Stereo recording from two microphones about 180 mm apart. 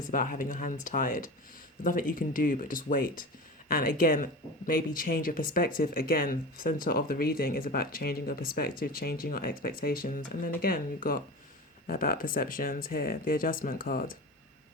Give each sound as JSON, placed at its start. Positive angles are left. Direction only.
{"t": 0.0, "sound": "speech", "side_deg": 50}